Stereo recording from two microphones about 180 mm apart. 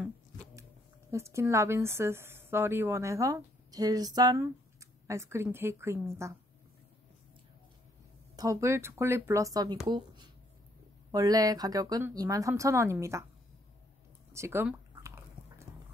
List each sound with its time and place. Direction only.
1.1 s a woman's voice: 15° right (ahead or behind)
8.4 s a woman's voice: 15° right (ahead or behind)
11.1 s speech: 20° right (ahead or behind)
14.3 s squish: 15° right (ahead or behind)